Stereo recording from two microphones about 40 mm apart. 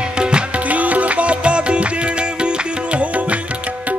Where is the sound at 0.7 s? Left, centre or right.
Right.